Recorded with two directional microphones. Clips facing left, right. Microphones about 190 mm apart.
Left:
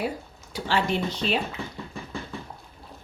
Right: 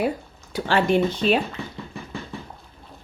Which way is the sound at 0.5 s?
55° right (ahead or behind).